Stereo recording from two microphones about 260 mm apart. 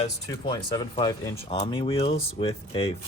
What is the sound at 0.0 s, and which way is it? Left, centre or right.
Speech, centre.